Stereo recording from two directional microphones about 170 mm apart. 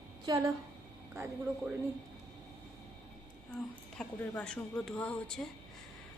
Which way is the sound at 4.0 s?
5° left (ahead or behind).